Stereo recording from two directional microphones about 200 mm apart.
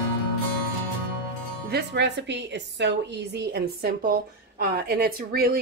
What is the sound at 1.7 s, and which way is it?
A woman's voice, 55° right (ahead or behind).